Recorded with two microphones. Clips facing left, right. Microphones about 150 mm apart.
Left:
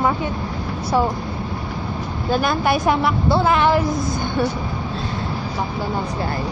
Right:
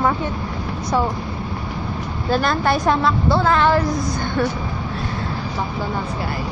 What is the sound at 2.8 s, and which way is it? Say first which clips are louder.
A woman's voice: even; 15° left (ahead or behind).